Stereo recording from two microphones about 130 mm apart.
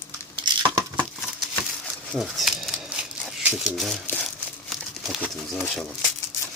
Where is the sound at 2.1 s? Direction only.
Centre (ahead or behind).